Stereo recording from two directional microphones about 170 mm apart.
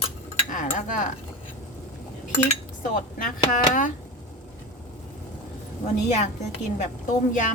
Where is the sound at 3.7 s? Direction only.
50° left (ahead or behind).